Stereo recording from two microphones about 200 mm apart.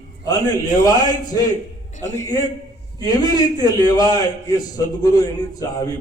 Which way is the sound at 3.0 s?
20° left (ahead or behind).